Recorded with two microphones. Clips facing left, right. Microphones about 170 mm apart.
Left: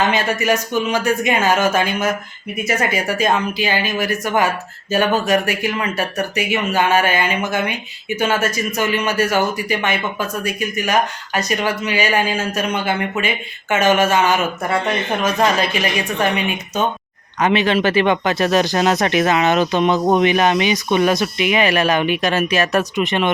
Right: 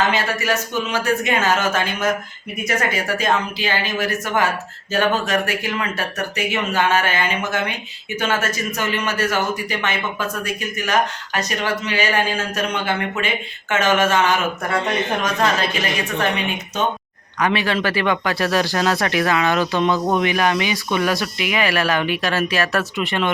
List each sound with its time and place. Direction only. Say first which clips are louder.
0.1 s a man's voice: left 3 dB; 15° left (ahead or behind)
17.4 s speech: left 4 dB; 20° left (ahead or behind)